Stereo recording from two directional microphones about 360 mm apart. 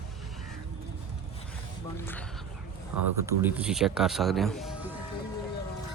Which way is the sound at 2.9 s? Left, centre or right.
Right.